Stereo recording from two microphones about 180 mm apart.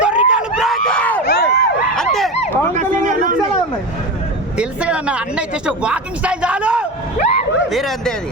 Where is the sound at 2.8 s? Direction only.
45° right (ahead or behind).